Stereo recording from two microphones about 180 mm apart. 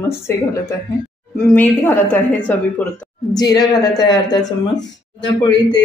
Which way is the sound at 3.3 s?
20° left (ahead or behind).